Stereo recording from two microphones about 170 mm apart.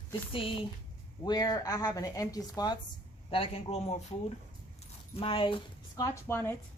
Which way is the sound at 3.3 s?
35° left (ahead or behind).